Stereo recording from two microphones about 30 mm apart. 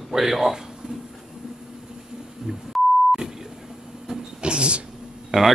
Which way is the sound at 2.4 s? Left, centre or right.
Centre.